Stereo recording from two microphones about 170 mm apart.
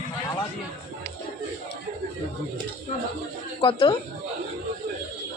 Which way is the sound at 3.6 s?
30° left (ahead or behind).